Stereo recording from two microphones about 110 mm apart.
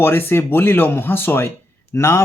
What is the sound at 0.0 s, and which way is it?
Speech, 20° left (ahead or behind).